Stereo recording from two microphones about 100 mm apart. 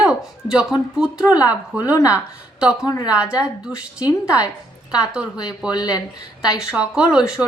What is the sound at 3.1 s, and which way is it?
Speech, 10° right (ahead or behind).